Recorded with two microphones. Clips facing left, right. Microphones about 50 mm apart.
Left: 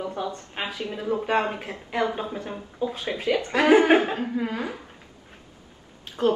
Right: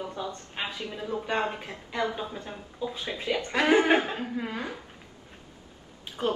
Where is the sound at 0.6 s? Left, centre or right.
Left.